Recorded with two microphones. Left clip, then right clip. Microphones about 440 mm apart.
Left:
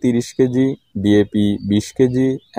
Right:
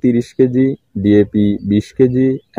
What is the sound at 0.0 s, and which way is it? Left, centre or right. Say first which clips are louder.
Speech: right 3 dB; left.